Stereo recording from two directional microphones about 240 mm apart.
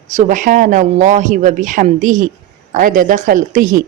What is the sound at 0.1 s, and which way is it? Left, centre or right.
Speech, right.